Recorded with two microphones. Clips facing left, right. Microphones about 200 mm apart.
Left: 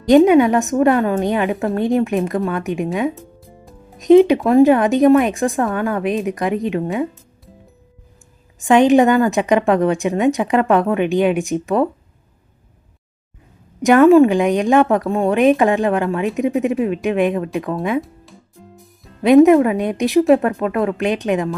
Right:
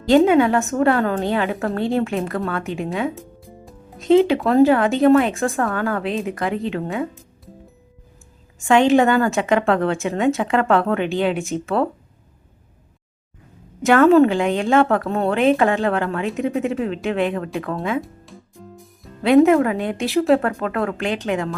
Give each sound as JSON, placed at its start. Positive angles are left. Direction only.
{"t": 0.0, "sound": "a woman's voice", "side_deg": 15}
{"t": 8.5, "sound": "a woman's voice", "side_deg": 15}
{"t": 13.8, "sound": "a woman's voice", "side_deg": 15}
{"t": 19.2, "sound": "a woman's voice", "side_deg": 20}